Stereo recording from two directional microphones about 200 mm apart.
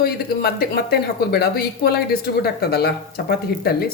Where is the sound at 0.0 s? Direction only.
55° left (ahead or behind).